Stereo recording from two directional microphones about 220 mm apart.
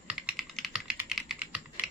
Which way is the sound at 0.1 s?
5° right (ahead or behind).